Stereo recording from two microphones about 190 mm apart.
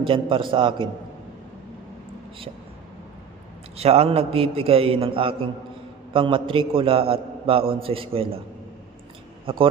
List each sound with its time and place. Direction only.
0.0 s a man's voice: 25° right (ahead or behind)
3.8 s a man's voice: 35° right (ahead or behind)